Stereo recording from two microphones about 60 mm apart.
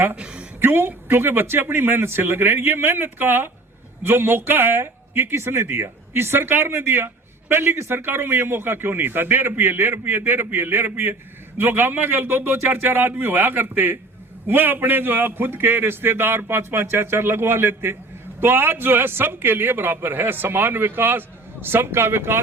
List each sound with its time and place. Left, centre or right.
0.2 s a woman's voice: centre
0.6 s a man's voice: right